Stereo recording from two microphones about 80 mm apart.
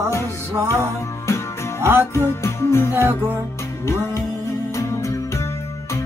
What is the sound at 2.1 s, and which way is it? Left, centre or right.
Music, left.